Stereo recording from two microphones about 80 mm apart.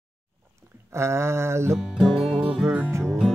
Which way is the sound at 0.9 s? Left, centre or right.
Right.